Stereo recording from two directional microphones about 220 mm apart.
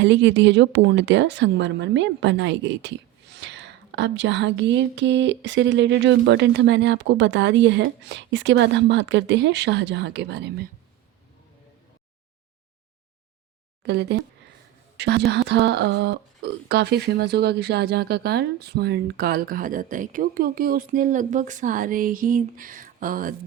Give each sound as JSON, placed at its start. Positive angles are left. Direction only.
{"t": 0.0, "sound": "speech", "side_deg": -55}
{"t": 13.8, "sound": "a woman's voice", "side_deg": -50}